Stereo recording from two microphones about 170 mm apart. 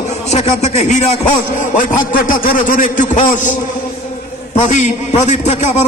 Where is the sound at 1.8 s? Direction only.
50° left (ahead or behind).